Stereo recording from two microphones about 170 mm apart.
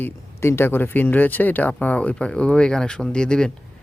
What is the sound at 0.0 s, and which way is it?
A man's voice, 15° left (ahead or behind).